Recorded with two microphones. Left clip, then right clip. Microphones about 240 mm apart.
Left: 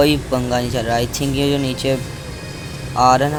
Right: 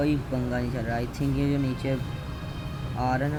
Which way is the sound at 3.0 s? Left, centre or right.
Centre.